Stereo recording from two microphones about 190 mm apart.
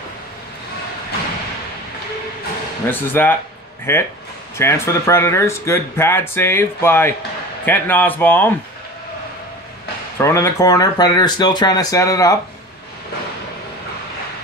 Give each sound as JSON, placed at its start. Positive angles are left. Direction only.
{"t": 2.9, "sound": "speech", "side_deg": 10}
{"t": 10.1, "sound": "speech", "side_deg": 15}